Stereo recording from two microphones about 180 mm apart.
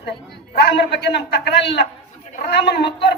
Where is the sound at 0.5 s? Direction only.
70° left (ahead or behind).